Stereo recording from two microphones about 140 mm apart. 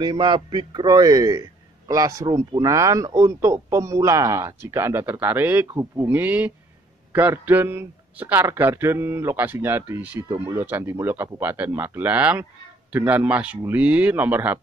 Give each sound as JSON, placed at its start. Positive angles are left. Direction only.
{"t": 0.0, "sound": "a man's voice", "side_deg": -35}